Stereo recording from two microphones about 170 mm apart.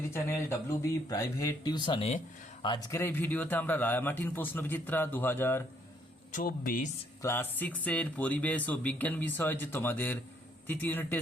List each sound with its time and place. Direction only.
0.1 s a man's voice: 15° left (ahead or behind)
6.3 s speech: 55° left (ahead or behind)
7.2 s a man's voice: 15° left (ahead or behind)